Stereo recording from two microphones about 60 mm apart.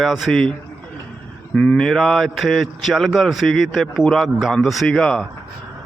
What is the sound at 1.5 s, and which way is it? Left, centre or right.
Speech, centre.